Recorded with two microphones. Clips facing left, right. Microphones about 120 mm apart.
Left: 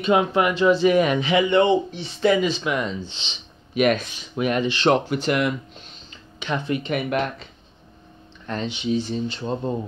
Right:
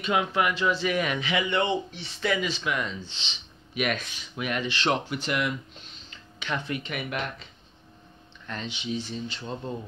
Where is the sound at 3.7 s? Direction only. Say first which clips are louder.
Left 9 dB; 35° left (ahead or behind).